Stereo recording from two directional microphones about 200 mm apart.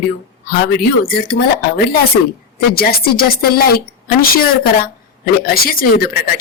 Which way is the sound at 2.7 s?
50° left (ahead or behind).